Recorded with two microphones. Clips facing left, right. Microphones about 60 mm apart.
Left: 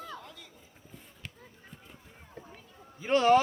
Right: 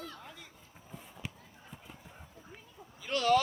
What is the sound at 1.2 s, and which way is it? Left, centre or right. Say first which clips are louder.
Basketball bounce: right 3 dB; centre.